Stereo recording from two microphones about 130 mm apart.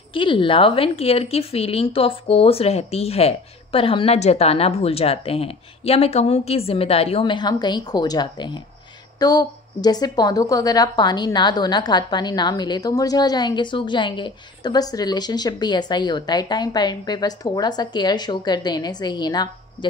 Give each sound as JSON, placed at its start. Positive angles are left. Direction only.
{"t": 0.1, "sound": "a woman's voice", "side_deg": 40}